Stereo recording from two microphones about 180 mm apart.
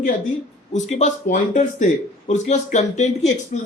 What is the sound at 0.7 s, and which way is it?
Speech, 40° left (ahead or behind).